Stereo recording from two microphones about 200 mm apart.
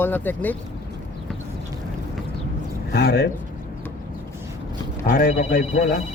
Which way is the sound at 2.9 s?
50° left (ahead or behind).